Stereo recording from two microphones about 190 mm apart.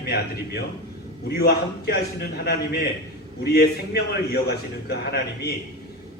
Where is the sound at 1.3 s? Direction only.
60° left (ahead or behind).